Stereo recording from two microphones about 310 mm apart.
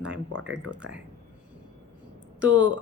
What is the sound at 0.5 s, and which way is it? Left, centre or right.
Speech, right.